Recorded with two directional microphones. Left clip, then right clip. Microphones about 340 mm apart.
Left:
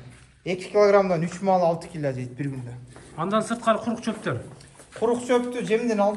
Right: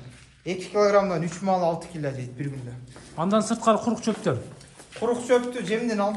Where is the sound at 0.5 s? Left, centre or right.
Left.